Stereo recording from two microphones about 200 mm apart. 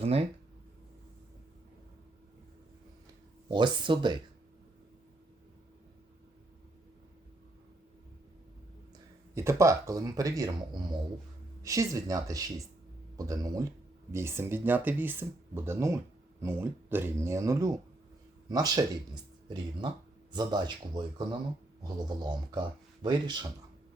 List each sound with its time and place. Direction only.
0.0 s speech: 30° right (ahead or behind)
3.5 s speech: 25° right (ahead or behind)
9.3 s speech: 15° right (ahead or behind)
20.3 s speech: 20° right (ahead or behind)